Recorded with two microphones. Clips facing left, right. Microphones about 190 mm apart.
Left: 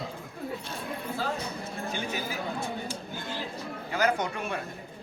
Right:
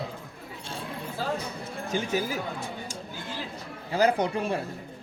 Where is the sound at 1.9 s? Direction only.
40° right (ahead or behind).